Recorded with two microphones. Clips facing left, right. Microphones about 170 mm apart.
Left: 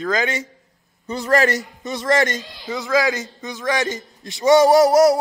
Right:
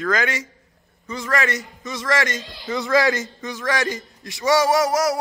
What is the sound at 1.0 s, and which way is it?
Speech, 35° left (ahead or behind).